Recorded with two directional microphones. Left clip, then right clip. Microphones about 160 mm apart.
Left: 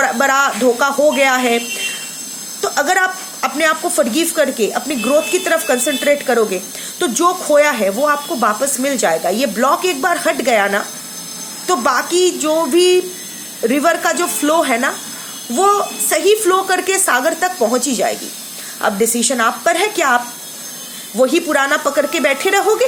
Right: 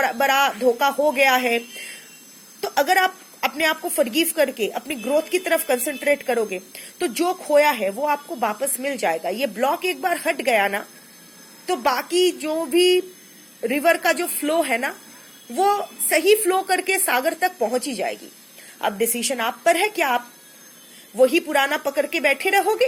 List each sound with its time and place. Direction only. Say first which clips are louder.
0.0 s a woman's voice: left 5 dB; 25° right (ahead or behind)